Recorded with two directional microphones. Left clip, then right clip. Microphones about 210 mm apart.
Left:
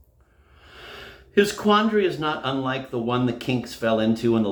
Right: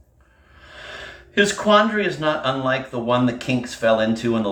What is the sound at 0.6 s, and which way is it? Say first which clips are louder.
Speech: right 5 dB; 50° left (ahead or behind).